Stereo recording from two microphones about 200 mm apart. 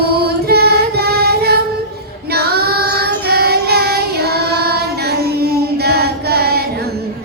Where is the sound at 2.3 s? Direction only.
50° right (ahead or behind).